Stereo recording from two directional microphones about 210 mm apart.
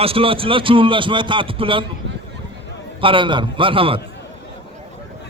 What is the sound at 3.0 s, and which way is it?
Speech, 25° right (ahead or behind).